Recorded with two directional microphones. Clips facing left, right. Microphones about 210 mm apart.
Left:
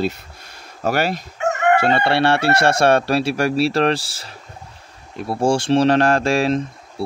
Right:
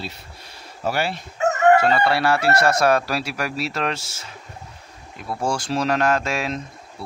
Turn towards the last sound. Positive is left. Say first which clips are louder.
# left 9 dB
turn(degrees=30)  # may be behind; listen again after turning